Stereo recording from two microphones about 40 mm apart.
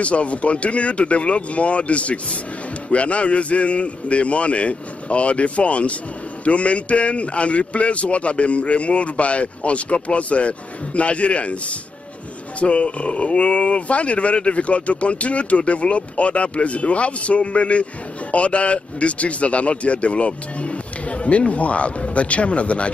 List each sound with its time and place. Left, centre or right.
0.0 s speech: left
12.5 s speech: left